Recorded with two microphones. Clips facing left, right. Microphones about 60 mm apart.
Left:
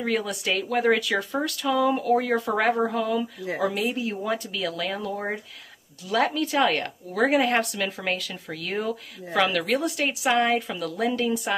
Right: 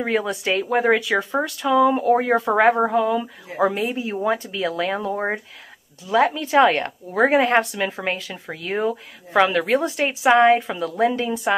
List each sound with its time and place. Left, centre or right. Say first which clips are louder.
0.0 s speech: right 4 dB; right
2.0 s speech: right 5 dB; right
6.0 s speech: right 5 dB; right